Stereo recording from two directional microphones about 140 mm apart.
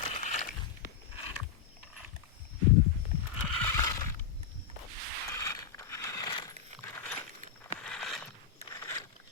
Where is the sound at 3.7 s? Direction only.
20° left (ahead or behind).